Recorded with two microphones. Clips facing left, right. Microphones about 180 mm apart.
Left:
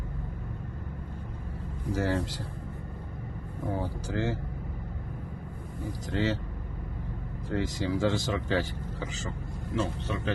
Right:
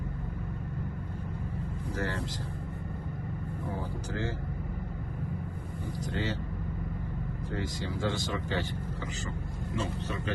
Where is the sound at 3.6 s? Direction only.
75° left (ahead or behind).